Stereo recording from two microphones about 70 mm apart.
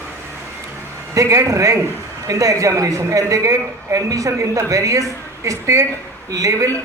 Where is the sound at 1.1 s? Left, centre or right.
Right.